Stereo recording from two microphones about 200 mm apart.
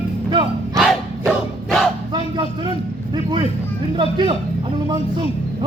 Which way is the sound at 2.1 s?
20° right (ahead or behind).